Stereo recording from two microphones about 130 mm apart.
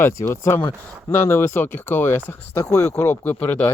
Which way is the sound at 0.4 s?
20° left (ahead or behind).